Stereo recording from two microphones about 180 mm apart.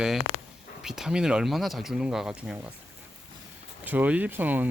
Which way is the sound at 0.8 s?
Centre (ahead or behind).